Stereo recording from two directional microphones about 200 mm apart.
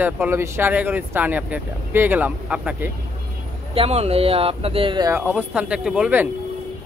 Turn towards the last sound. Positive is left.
turn(degrees=-5)  # may be behind; listen again after turning